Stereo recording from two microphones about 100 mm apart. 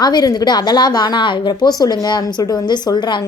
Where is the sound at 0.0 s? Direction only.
45° left (ahead or behind).